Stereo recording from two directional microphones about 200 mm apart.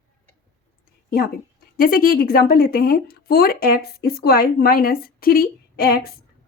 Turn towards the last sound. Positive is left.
turn(degrees=50)  # may be behind; listen again after turning